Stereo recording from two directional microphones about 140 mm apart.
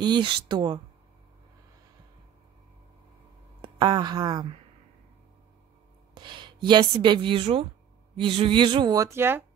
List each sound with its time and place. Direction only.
0.0 s speech: 35° right (ahead or behind)
3.8 s speech: 30° right (ahead or behind)
6.1 s speech: 35° right (ahead or behind); by 9.4 s 15° right (ahead or behind)